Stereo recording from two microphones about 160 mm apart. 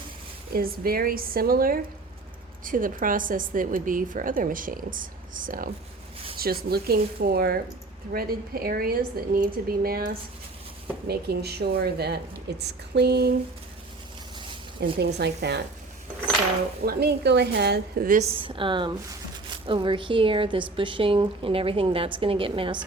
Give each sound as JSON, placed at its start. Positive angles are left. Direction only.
{"t": 0.5, "sound": "a woman's voice", "side_deg": -70}
{"t": 6.4, "sound": "a woman's voice", "side_deg": -75}
{"t": 11.1, "sound": "a woman's voice", "side_deg": -90}
{"t": 14.9, "sound": "a woman's voice", "side_deg": -90}
{"t": 16.8, "sound": "a woman's voice", "side_deg": -80}
{"t": 18.2, "sound": "a woman's voice", "side_deg": -35}